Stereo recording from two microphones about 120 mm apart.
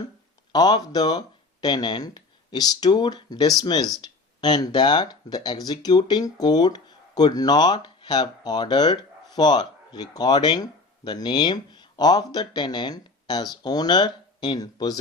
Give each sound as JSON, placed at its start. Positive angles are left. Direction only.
{"t": 0.5, "sound": "speech", "side_deg": 35}